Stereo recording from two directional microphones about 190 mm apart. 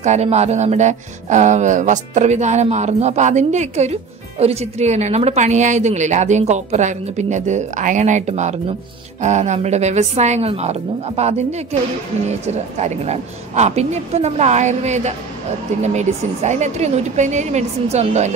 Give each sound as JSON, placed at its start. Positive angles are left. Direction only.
{"t": 0.0, "sound": "speech", "side_deg": -35}